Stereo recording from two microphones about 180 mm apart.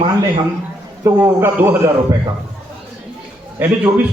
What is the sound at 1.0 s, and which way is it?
Speech, 15° right (ahead or behind).